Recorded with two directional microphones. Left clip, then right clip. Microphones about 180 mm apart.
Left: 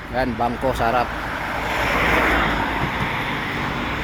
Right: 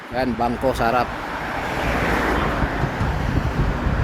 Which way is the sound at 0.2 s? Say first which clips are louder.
Even; 25° right (ahead or behind).